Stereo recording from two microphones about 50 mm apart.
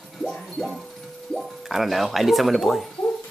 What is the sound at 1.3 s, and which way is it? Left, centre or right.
Speech, centre.